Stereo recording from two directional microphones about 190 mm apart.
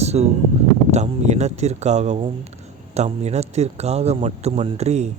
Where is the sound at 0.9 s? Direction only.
35° right (ahead or behind).